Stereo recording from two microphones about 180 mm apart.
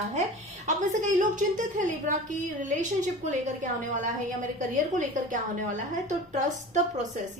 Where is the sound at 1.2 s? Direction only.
45° right (ahead or behind).